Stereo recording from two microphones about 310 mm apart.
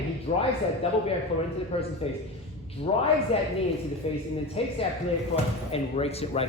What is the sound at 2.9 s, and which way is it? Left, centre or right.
Speech, centre.